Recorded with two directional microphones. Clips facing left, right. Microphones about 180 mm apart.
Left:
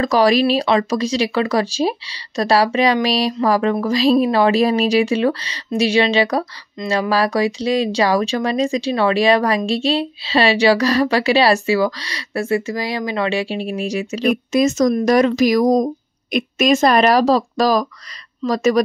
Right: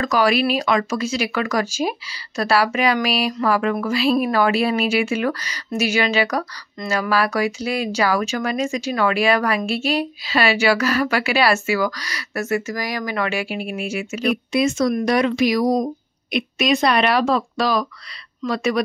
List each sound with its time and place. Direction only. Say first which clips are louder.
0.0 s speech: left 4 dB; 35° left (ahead or behind)